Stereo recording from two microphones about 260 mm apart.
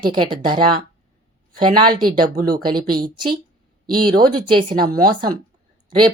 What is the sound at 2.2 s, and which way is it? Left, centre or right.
Speech, right.